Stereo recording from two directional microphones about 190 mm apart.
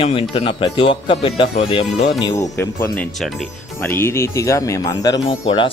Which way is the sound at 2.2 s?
15° left (ahead or behind).